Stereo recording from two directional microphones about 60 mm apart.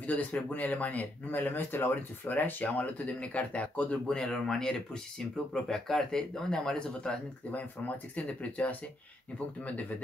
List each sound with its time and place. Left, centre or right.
0.0 s speech: left
4.1 s speech: centre
7.0 s speech: left